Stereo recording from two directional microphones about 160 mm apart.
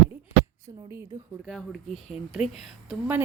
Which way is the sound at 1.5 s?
Centre (ahead or behind).